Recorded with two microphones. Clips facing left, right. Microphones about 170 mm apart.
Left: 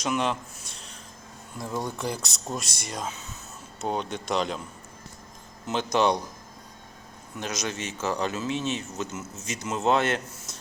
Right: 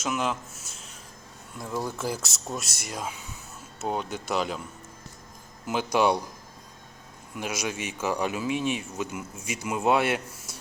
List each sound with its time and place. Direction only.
0.0 s speech: 5° right (ahead or behind)
5.6 s speech: 10° right (ahead or behind)
7.3 s speech: 10° right (ahead or behind)